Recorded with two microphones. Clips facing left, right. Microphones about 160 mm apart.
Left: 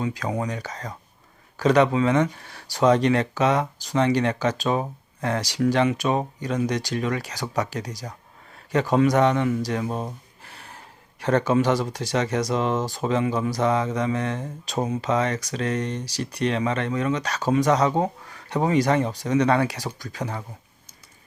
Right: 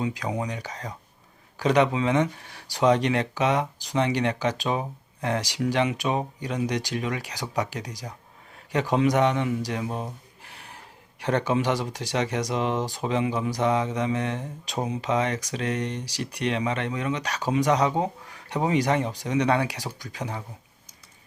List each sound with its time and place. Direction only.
0.0 s speech: 20° right (ahead or behind)
10.4 s a sound: 15° right (ahead or behind)
11.2 s speech: 15° right (ahead or behind)